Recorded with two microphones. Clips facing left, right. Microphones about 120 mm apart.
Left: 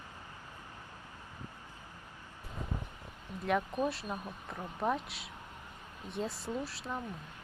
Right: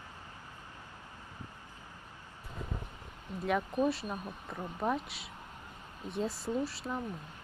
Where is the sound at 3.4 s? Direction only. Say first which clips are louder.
Right 2 dB; centre (ahead or behind).